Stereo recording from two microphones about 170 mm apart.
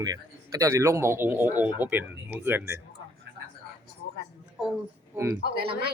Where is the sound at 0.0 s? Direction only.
20° right (ahead or behind).